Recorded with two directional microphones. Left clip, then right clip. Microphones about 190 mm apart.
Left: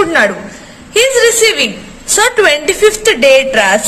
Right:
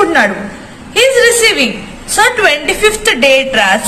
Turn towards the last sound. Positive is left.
turn(degrees=35)  # may be behind; listen again after turning